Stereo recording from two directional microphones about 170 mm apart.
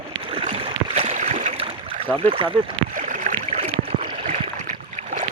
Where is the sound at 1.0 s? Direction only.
45° right (ahead or behind).